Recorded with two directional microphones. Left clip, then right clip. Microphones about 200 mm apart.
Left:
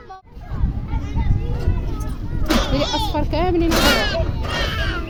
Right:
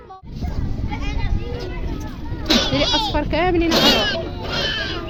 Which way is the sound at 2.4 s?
20° left (ahead or behind).